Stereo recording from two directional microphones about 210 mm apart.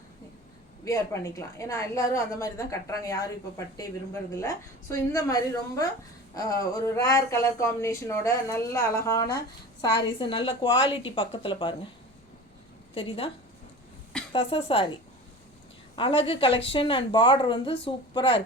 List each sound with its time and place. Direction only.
0.9 s a woman's voice: 15° left (ahead or behind)
12.9 s a woman's voice: 25° left (ahead or behind)
14.3 s a woman's voice: 25° left (ahead or behind)
16.0 s a woman's voice: 25° left (ahead or behind)